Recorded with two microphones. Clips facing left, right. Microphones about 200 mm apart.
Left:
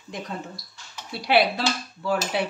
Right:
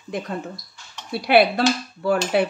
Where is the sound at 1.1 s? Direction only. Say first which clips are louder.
Right 5 dB; 60° right (ahead or behind).